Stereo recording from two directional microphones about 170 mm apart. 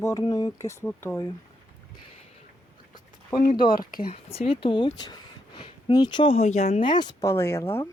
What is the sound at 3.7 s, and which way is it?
Speech, 60° left (ahead or behind).